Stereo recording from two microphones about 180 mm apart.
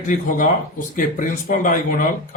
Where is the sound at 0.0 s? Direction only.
45° left (ahead or behind).